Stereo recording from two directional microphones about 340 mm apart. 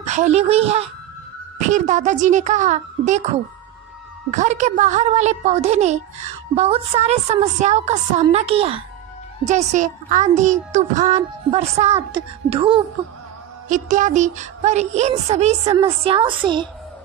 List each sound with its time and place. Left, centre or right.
0.0 s a child's voice: centre
4.3 s a child's voice: right